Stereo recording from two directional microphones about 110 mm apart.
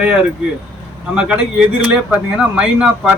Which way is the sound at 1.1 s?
10° right (ahead or behind).